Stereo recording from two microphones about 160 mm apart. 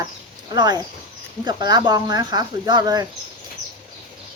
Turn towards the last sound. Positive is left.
turn(degrees=-25)  # may be behind; listen again after turning